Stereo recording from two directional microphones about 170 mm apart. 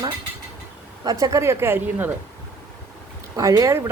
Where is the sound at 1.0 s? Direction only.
20° right (ahead or behind).